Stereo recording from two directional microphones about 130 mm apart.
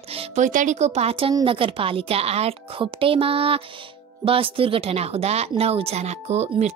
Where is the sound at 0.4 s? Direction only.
75° right (ahead or behind).